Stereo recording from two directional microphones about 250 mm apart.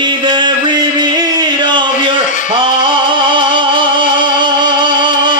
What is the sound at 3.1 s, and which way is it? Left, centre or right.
Music, centre.